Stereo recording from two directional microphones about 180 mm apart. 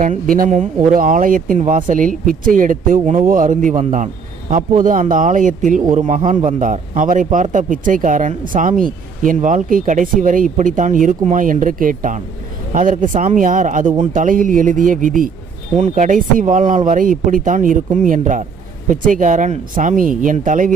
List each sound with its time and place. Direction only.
0.0 s speech: 50° right (ahead or behind)